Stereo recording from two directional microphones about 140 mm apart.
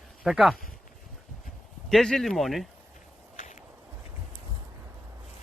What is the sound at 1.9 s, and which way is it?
Speech, 5° left (ahead or behind).